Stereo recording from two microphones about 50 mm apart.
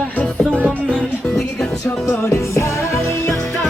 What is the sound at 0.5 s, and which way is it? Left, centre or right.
Music, right.